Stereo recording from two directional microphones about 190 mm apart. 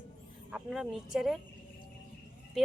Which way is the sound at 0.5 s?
Centre (ahead or behind).